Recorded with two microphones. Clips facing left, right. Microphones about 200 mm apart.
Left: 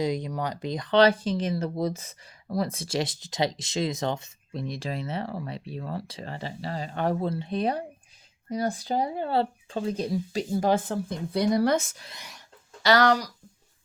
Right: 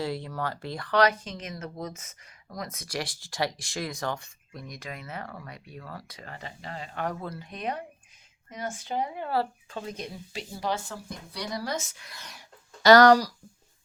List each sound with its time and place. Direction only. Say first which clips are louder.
0.0 s speech: left 4 dB; 15° left (ahead or behind); by 11.9 s 60° left (ahead or behind)
12.8 s speech: right 5 dB; 40° right (ahead or behind)